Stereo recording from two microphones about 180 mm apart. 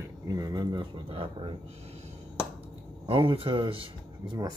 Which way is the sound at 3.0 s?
30° right (ahead or behind).